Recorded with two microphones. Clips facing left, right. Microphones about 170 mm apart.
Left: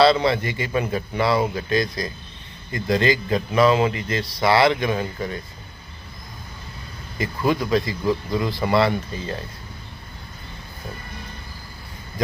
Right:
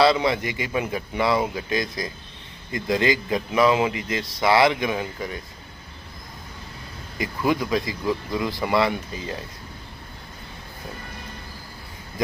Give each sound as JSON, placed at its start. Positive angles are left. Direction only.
{"t": 0.0, "sound": "a man's voice", "side_deg": -15}
{"t": 7.2, "sound": "a man's voice", "side_deg": -15}
{"t": 8.0, "sound": "a man's voice", "side_deg": -5}